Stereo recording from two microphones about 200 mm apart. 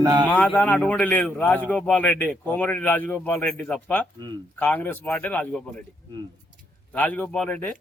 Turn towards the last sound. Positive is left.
turn(degrees=10)  # may be behind; listen again after turning